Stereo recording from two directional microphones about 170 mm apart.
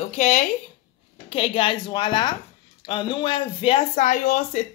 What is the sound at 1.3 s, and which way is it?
Speech, 30° left (ahead or behind).